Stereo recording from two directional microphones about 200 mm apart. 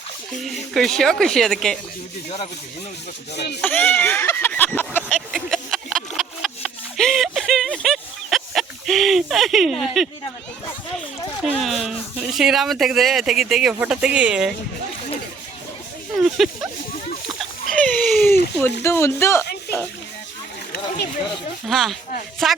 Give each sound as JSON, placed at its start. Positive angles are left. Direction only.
{"t": 0.3, "sound": "speech", "side_deg": 0}
{"t": 3.3, "sound": "a sound", "side_deg": 55}
{"t": 3.6, "sound": "a sound", "side_deg": 5}
{"t": 9.8, "sound": "speech", "side_deg": 0}
{"t": 11.6, "sound": "speech", "side_deg": 0}
{"t": 16.4, "sound": "speech", "side_deg": 0}
{"t": 17.2, "sound": "a sound", "side_deg": 5}
{"t": 18.8, "sound": "speech", "side_deg": 15}
{"t": 21.7, "sound": "speech", "side_deg": 0}